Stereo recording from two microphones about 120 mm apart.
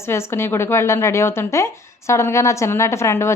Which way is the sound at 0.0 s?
20° left (ahead or behind).